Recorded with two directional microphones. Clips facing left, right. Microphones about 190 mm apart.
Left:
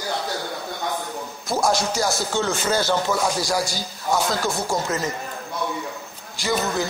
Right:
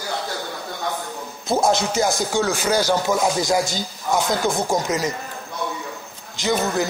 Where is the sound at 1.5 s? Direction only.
20° right (ahead or behind).